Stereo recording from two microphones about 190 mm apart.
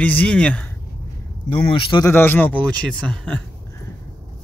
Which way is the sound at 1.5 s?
25° left (ahead or behind).